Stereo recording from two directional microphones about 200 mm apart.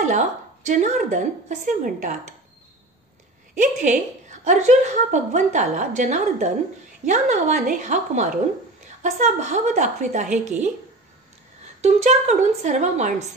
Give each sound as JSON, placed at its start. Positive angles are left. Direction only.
{"t": 0.0, "sound": "a woman's voice", "side_deg": -35}
{"t": 3.5, "sound": "a woman's voice", "side_deg": -35}
{"t": 11.8, "sound": "a woman's voice", "side_deg": -35}